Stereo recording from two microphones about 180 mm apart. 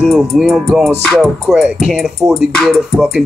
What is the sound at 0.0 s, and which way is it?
Music, centre (ahead or behind).